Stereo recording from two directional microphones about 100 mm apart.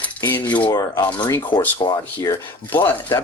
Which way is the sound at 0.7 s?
35° left (ahead or behind).